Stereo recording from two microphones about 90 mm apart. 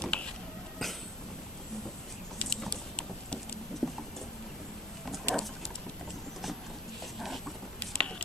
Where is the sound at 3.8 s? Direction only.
Centre (ahead or behind).